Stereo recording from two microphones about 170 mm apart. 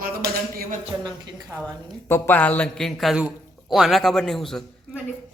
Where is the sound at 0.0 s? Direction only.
60° right (ahead or behind).